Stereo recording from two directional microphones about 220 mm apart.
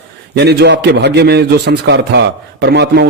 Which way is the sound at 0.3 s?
50° right (ahead or behind).